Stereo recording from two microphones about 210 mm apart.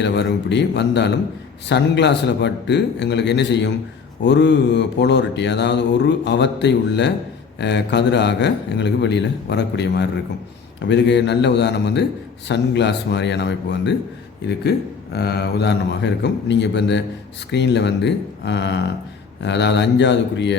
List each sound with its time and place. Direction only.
0.0 s speech: 55° left (ahead or behind)